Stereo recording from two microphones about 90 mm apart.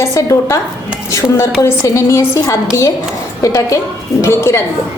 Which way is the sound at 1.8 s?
35° left (ahead or behind).